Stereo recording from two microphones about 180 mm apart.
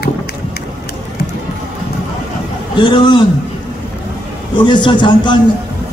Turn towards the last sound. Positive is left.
turn(degrees=25)  # may be behind; listen again after turning